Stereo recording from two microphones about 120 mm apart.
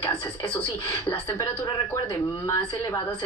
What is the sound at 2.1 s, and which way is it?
Speech, 25° left (ahead or behind).